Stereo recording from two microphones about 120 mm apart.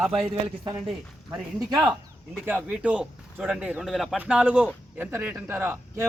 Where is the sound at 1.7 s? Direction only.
30° right (ahead or behind).